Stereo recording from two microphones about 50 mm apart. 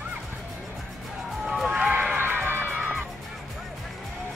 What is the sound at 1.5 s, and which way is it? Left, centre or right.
Music, centre.